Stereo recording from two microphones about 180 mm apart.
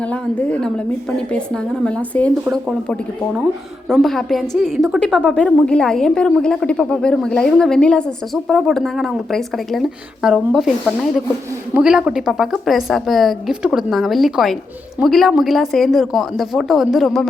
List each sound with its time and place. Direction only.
0.1 s a woman's voice: 5° left (ahead or behind)
1.8 s a woman's voice: 5° left (ahead or behind)
3.8 s a woman's voice: centre (ahead or behind)